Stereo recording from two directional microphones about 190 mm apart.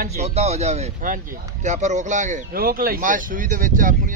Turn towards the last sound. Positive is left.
turn(degrees=-45)  # may be behind; listen again after turning